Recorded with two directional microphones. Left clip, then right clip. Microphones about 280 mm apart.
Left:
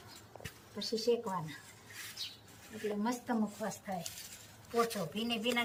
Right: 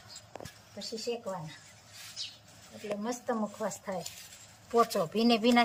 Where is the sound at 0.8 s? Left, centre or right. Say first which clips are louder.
Left 3 dB; centre.